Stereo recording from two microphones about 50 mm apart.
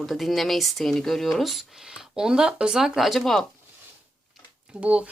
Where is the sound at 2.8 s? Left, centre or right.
Centre.